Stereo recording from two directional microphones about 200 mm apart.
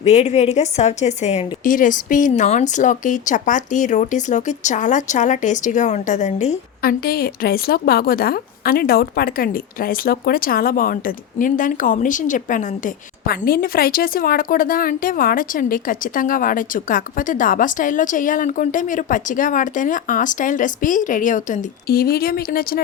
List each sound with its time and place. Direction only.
0.0 s a woman's voice: 35° left (ahead or behind)
6.8 s a woman's voice: 50° left (ahead or behind)